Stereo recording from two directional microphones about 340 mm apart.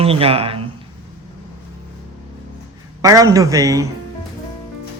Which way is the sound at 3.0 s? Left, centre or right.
Centre.